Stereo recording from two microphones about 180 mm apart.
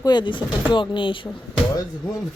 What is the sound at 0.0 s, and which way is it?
Speech, 25° left (ahead or behind).